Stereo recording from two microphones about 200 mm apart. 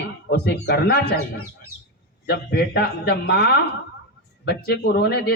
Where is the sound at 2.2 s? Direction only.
55° left (ahead or behind).